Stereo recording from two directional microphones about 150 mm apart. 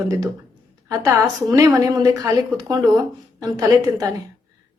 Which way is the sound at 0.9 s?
20° right (ahead or behind).